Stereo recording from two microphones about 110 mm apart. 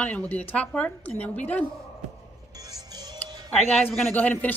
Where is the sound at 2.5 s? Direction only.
35° right (ahead or behind).